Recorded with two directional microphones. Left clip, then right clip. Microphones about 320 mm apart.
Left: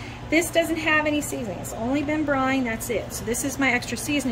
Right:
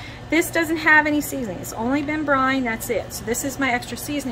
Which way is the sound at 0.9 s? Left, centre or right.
Centre.